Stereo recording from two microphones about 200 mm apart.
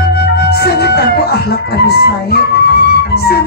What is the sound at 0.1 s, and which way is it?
Music, 55° left (ahead or behind).